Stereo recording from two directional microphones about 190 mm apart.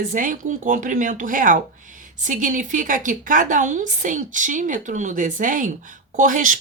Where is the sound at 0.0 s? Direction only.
45° right (ahead or behind).